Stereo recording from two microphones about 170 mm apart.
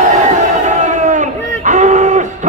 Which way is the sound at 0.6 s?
45° right (ahead or behind).